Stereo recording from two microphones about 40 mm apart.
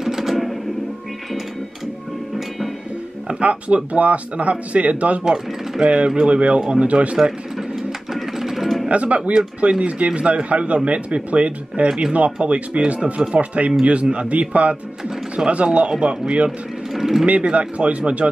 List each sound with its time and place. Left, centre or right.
0.0 s a sound: centre
3.3 s speech: right
5.2 s a man's voice: centre
5.9 s a man's voice: right
8.1 s music: centre
8.8 s a man's voice: right
16.4 s vehicle: centre
17.3 s speech: right